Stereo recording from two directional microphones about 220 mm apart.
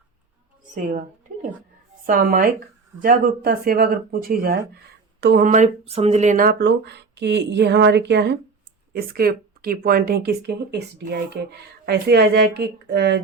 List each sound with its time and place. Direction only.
0.8 s a woman's voice: 35° right (ahead or behind)